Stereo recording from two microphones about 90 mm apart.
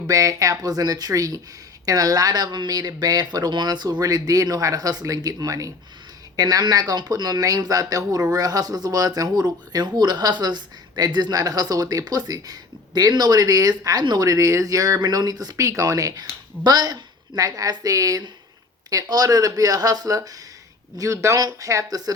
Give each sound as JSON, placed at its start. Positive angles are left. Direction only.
{"t": 0.1, "sound": "speech", "side_deg": -40}